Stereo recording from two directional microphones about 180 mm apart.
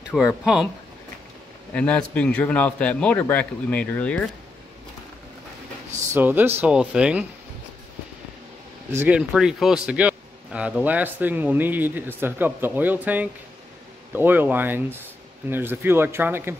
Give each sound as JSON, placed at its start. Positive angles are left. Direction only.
{"t": 0.1, "sound": "speech", "side_deg": 0}
{"t": 1.7, "sound": "a man's voice", "side_deg": 5}
{"t": 6.1, "sound": "a man's voice", "side_deg": -10}
{"t": 8.9, "sound": "a man's voice", "side_deg": -10}